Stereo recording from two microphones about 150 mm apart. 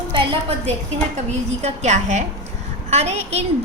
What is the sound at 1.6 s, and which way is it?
A woman's voice, 50° right (ahead or behind).